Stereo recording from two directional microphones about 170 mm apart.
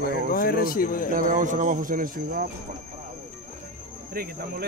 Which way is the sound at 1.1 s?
50° right (ahead or behind).